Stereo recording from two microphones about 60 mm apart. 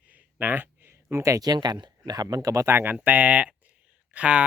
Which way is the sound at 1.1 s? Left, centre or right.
Right.